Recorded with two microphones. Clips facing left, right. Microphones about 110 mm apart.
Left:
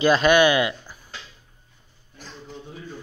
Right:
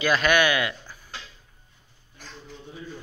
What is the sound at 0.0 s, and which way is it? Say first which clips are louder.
Speech: left 5 dB; 25° left (ahead or behind).